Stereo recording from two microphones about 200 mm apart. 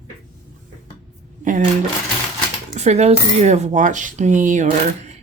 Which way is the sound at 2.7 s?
35° right (ahead or behind).